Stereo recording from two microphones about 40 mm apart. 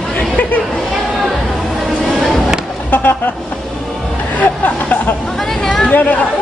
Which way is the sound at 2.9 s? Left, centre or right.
Left.